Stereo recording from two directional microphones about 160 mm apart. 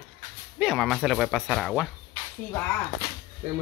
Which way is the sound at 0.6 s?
Centre (ahead or behind).